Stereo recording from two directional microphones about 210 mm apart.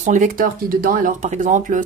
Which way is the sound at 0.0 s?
35° right (ahead or behind).